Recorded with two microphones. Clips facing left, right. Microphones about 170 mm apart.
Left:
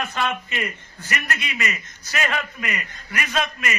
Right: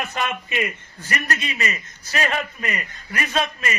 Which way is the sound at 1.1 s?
30° right (ahead or behind).